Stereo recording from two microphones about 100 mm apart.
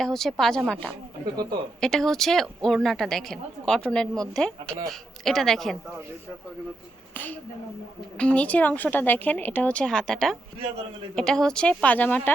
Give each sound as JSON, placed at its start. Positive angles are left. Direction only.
{"t": 0.0, "sound": "a woman's voice", "side_deg": 5}
{"t": 1.2, "sound": "speech", "side_deg": -40}
{"t": 1.8, "sound": "a woman's voice", "side_deg": 5}
{"t": 8.2, "sound": "speech", "side_deg": 10}